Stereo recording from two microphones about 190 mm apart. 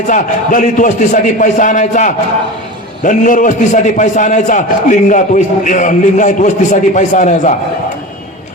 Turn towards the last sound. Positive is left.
turn(degrees=40)  # may be behind; listen again after turning